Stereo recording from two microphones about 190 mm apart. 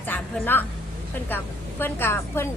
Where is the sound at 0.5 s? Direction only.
10° left (ahead or behind).